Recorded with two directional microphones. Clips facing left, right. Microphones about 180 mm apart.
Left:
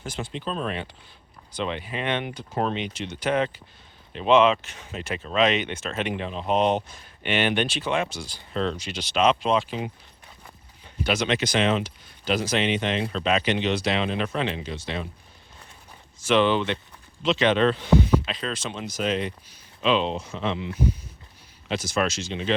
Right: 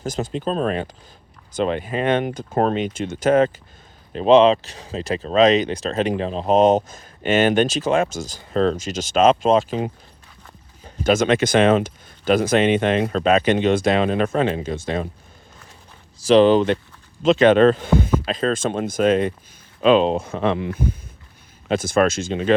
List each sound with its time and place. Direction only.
0.0 s speech: 40° right (ahead or behind)
16.1 s speech: 35° right (ahead or behind)